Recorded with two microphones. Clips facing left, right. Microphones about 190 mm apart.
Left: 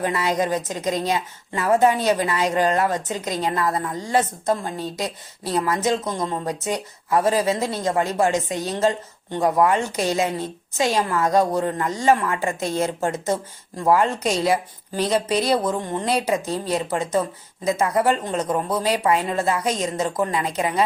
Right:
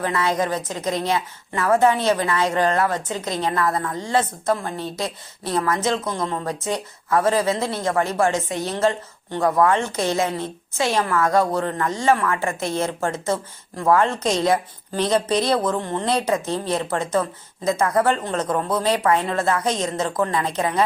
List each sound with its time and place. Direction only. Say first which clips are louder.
0.0 s speech: even; 15° left (ahead or behind)